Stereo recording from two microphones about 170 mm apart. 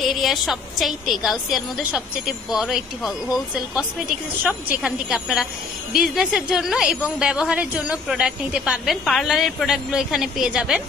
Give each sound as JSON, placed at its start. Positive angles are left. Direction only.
{"t": 0.0, "sound": "a woman's voice", "side_deg": 0}
{"t": 4.4, "sound": "a woman's voice", "side_deg": -10}